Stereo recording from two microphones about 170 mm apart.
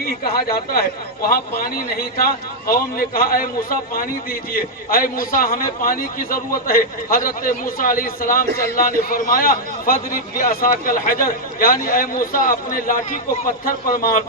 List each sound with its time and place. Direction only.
0.0 s a man's voice: 60° left (ahead or behind)